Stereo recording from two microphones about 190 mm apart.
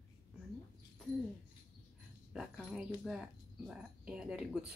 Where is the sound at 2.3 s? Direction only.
Centre (ahead or behind).